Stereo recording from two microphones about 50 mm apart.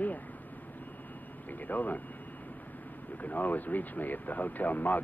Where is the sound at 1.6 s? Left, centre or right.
Left.